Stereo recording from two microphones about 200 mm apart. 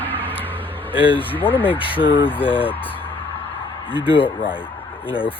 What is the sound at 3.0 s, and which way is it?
Music, 10° left (ahead or behind).